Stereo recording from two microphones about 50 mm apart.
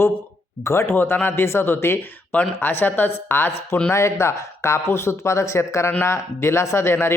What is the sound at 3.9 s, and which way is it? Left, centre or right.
A man's voice, left.